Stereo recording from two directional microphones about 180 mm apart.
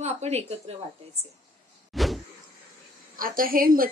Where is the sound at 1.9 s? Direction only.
Centre (ahead or behind).